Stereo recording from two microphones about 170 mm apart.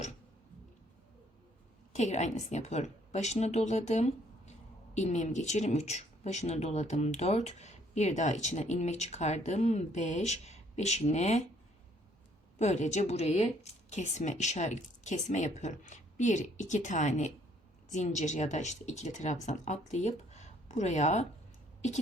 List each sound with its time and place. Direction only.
1.9 s a woman's voice: 45° left (ahead or behind)
12.5 s speech: 40° left (ahead or behind)